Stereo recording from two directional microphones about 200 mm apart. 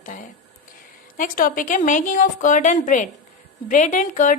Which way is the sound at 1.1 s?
40° left (ahead or behind).